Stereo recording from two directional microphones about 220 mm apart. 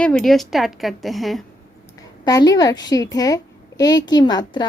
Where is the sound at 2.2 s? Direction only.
15° left (ahead or behind).